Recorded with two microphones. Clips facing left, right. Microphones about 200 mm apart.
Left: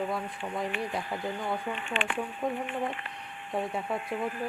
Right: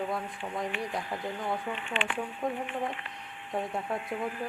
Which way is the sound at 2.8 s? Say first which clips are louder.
Left 1 dB; 50° left (ahead or behind).